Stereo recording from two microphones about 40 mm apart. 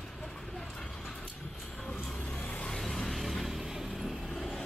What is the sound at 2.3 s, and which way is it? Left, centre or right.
Vehicle, left.